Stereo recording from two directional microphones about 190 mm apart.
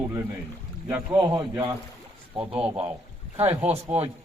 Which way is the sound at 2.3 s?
30° right (ahead or behind).